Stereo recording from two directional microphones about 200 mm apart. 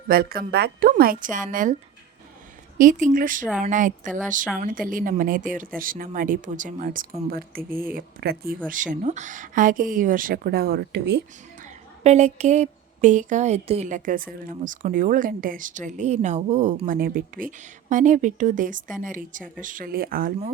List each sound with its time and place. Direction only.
0.1 s speech: 50° right (ahead or behind)
2.7 s a woman's voice: 40° right (ahead or behind); by 11.2 s 55° right (ahead or behind)
11.6 s a woman's voice: 35° right (ahead or behind)